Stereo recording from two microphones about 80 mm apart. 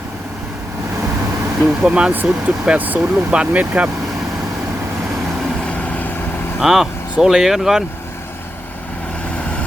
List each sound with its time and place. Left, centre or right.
1.6 s speech: centre
5.6 s vehicle: centre
6.6 s speech: centre